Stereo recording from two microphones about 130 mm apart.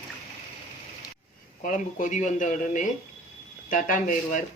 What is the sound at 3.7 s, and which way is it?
Speech, 90° left.